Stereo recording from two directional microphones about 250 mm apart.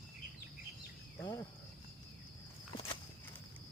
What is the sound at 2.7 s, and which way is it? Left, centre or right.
Walk, centre.